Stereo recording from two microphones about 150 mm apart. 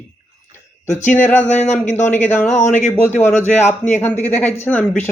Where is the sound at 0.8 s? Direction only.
55° left (ahead or behind).